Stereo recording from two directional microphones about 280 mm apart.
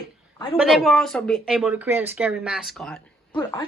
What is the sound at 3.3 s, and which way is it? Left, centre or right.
Speech, centre.